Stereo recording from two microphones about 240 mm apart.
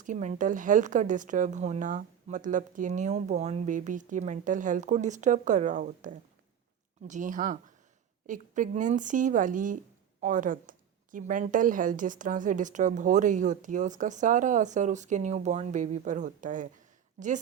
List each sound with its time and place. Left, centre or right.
0.0 s speech: right